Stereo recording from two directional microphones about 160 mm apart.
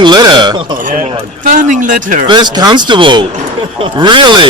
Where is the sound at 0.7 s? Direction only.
55° right (ahead or behind).